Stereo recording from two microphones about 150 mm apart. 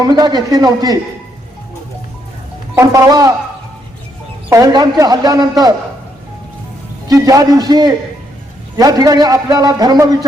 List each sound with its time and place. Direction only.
0.0 s a man's voice: 30° right (ahead or behind)
2.7 s a man's voice: 20° right (ahead or behind)
4.4 s a man's voice: 20° right (ahead or behind)
7.1 s a man's voice: 25° right (ahead or behind)